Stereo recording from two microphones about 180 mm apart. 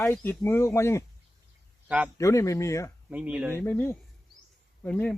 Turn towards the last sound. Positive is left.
turn(degrees=5)  # may be behind; listen again after turning